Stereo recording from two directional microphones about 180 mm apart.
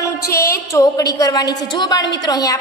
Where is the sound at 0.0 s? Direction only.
15° left (ahead or behind).